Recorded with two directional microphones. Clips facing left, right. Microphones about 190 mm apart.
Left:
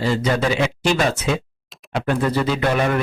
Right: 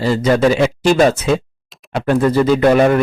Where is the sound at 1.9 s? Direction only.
45° right (ahead or behind).